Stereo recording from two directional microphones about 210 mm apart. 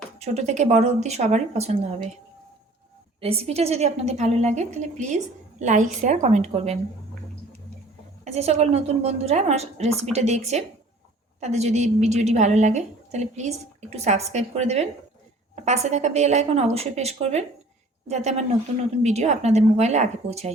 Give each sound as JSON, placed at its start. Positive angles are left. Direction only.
{"t": 0.2, "sound": "a woman's voice", "side_deg": -30}
{"t": 3.2, "sound": "a woman's voice", "side_deg": -30}
{"t": 8.2, "sound": "a woman's voice", "side_deg": -30}